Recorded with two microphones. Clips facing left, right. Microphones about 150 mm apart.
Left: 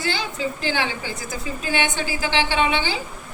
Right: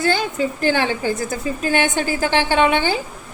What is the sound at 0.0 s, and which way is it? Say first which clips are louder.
A woman's voice: right 6 dB; 45° right (ahead or behind).